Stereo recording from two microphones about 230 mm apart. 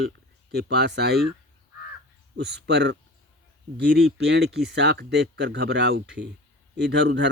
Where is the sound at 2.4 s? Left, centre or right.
Right.